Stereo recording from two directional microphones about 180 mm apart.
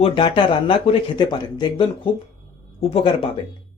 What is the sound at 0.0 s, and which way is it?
Speech, 25° left (ahead or behind).